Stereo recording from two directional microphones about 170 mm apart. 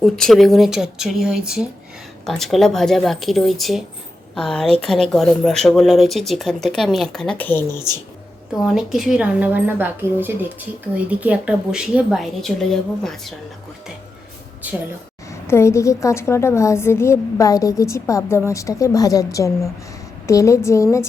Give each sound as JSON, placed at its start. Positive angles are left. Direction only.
{"t": 0.0, "sound": "speech", "side_deg": 0}
{"t": 8.6, "sound": "a woman's voice", "side_deg": 0}
{"t": 14.6, "sound": "a woman's voice", "side_deg": -10}
{"t": 15.3, "sound": "a woman's voice", "side_deg": 15}